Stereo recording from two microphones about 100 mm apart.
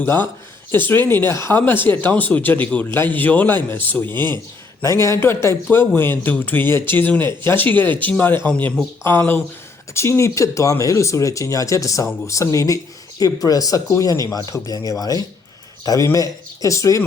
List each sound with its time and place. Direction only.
0.0 s speech: 20° left (ahead or behind)
4.1 s speech: 45° right (ahead or behind)
4.8 s a man's voice: 30° left (ahead or behind)